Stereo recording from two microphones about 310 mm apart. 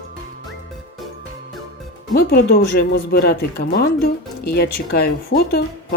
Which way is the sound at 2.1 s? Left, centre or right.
Left.